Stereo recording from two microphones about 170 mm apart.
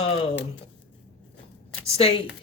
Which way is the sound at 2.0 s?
35° left (ahead or behind).